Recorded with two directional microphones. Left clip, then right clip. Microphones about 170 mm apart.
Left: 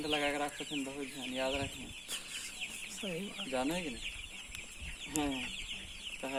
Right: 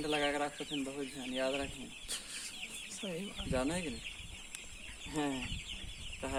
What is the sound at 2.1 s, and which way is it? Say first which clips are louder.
Chicken: left 1 dB; 10° left (ahead or behind).